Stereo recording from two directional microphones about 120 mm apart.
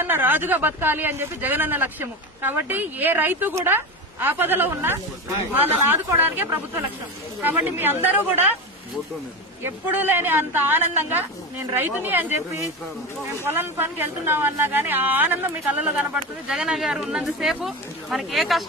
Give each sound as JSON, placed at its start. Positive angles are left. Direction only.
{"t": 0.0, "sound": "a woman's voice", "side_deg": -15}
{"t": 9.6, "sound": "a woman's voice", "side_deg": -20}